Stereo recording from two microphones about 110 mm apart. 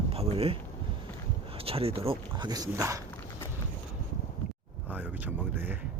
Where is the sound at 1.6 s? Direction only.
60° right (ahead or behind).